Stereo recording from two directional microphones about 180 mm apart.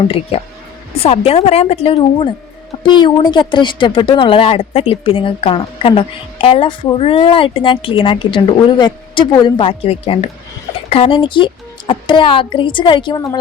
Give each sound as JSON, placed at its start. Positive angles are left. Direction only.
{"t": 0.9, "sound": "a woman's voice", "side_deg": 35}